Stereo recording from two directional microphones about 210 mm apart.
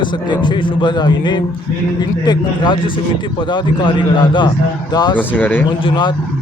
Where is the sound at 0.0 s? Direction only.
20° left (ahead or behind).